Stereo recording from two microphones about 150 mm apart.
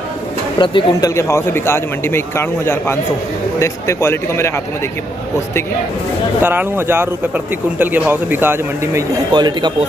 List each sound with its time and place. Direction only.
0.6 s speech: 30° left (ahead or behind)
1.1 s a man's voice: 20° left (ahead or behind)
6.4 s speech: 15° right (ahead or behind)
9.3 s a man's voice: 30° right (ahead or behind)